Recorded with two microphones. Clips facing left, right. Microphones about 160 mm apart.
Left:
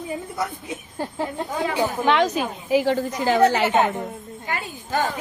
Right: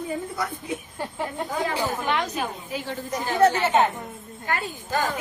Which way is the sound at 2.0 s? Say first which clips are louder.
Left 6 dB; 90° left.